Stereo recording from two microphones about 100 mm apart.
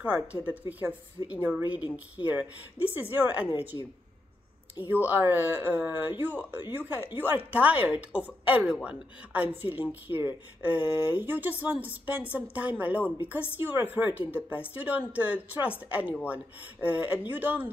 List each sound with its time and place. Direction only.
0.0 s a woman's voice: 15° right (ahead or behind)
5.0 s a woman's voice: 20° right (ahead or behind)